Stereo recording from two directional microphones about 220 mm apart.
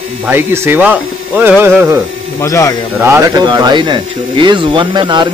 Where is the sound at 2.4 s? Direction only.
15° left (ahead or behind).